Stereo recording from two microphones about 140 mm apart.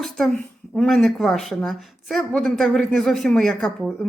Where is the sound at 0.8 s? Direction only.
Centre (ahead or behind).